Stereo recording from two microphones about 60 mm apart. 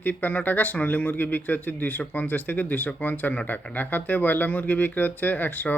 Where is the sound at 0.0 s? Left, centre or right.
Left.